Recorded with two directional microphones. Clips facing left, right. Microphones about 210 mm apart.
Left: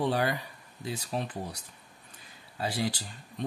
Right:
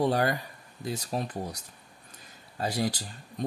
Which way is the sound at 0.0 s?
45° right (ahead or behind).